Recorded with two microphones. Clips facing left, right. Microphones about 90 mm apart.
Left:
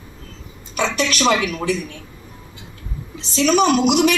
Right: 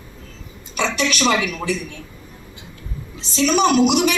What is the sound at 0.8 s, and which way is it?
Speech, 40° left (ahead or behind).